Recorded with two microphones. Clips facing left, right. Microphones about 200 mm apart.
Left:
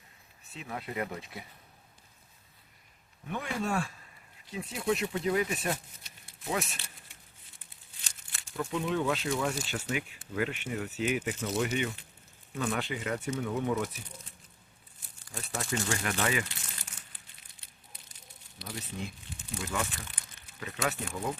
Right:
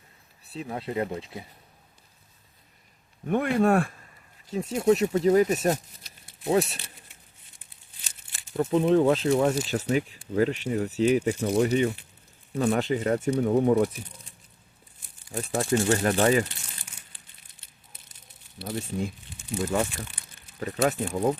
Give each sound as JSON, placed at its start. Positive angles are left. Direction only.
{"t": 0.5, "sound": "speech", "side_deg": -30}
{"t": 3.2, "sound": "speech", "side_deg": -55}
{"t": 4.4, "sound": "speech", "side_deg": -45}
{"t": 8.5, "sound": "speech", "side_deg": -40}
{"t": 15.4, "sound": "speech", "side_deg": -35}
{"t": 17.5, "sound": "a sound", "side_deg": -20}
{"t": 18.7, "sound": "speech", "side_deg": -45}